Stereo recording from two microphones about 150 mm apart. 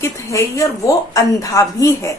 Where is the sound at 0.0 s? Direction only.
20° left (ahead or behind).